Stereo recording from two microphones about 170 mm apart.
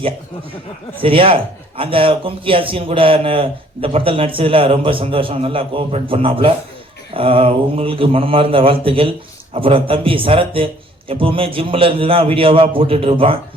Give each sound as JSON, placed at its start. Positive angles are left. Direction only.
{"t": 1.0, "sound": "speech", "side_deg": -30}